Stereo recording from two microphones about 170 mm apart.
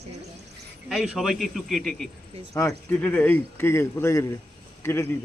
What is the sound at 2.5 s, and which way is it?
Speech, 15° left (ahead or behind).